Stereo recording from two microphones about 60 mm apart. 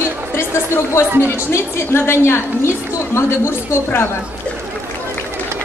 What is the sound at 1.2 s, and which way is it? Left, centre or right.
A woman's voice, left.